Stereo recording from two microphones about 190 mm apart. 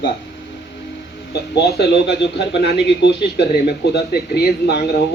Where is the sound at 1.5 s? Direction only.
60° left (ahead or behind).